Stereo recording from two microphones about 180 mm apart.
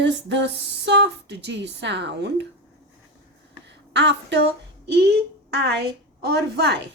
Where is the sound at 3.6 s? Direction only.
75° right (ahead or behind).